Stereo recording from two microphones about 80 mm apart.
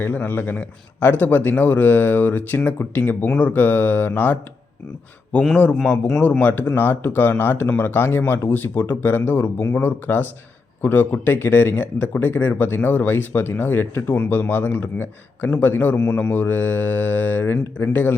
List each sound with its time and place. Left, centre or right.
0.0 s a man's voice: left
6.4 s a man's voice: left